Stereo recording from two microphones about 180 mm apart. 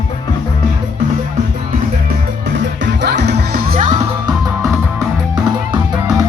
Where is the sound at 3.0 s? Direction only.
65° right (ahead or behind).